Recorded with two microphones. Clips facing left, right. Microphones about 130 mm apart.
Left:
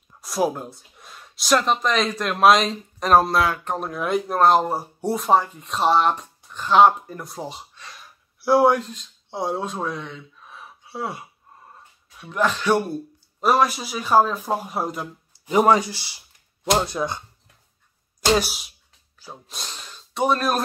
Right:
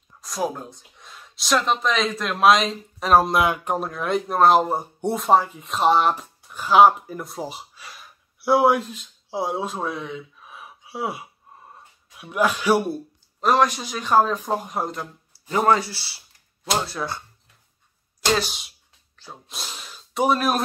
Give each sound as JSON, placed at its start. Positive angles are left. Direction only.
{"t": 0.2, "sound": "speech", "side_deg": 10}
{"t": 3.3, "sound": "speech", "side_deg": -20}
{"t": 3.8, "sound": "speech", "side_deg": 0}
{"t": 13.4, "sound": "speech", "side_deg": 10}
{"t": 18.2, "sound": "a sound", "side_deg": 10}
{"t": 19.5, "sound": "snort", "side_deg": -5}